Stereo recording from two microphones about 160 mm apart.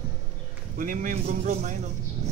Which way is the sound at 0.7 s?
60° right (ahead or behind).